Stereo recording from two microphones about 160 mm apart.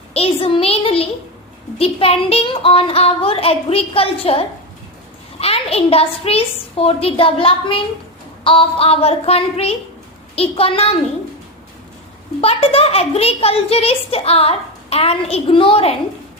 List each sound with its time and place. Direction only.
0.1 s a child's voice: 35° left (ahead or behind)
12.4 s a child's voice: 35° left (ahead or behind)